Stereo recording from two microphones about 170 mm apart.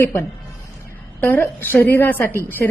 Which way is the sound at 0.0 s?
15° left (ahead or behind).